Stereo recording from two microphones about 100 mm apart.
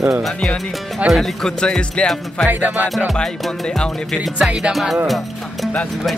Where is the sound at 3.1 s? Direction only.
5° left (ahead or behind).